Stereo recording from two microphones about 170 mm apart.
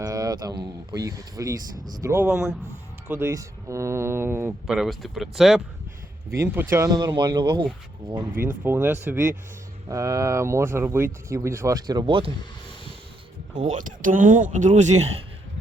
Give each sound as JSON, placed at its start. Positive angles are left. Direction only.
{"t": 0.0, "sound": "speech", "side_deg": -20}
{"t": 4.6, "sound": "speech", "side_deg": 0}
{"t": 6.3, "sound": "speech", "side_deg": -15}
{"t": 8.3, "sound": "speech", "side_deg": -55}
{"t": 8.6, "sound": "speech", "side_deg": -10}
{"t": 13.5, "sound": "speech", "side_deg": -50}